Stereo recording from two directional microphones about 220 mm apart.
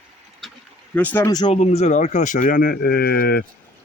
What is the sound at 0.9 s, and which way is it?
Speech, 10° left (ahead or behind).